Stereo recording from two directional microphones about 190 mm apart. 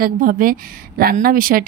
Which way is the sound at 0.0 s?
45° right (ahead or behind).